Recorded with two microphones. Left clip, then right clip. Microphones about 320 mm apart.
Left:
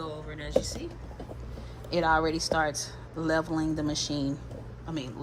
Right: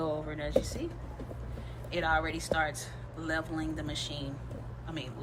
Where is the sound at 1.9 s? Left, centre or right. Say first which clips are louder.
Left 5 dB; centre.